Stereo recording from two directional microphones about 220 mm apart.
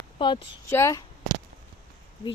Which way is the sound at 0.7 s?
15° left (ahead or behind).